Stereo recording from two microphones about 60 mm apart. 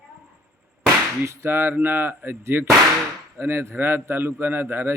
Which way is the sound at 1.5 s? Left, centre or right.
Right.